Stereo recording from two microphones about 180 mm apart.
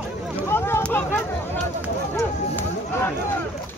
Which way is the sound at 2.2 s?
10° left (ahead or behind).